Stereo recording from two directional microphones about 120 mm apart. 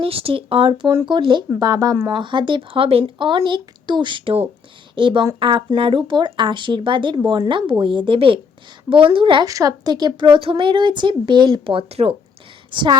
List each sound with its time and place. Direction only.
0.0 s a woman's voice: 50° right (ahead or behind)
9.5 s speech: 30° right (ahead or behind); by 12.1 s 55° right (ahead or behind)
12.7 s speech: 40° right (ahead or behind)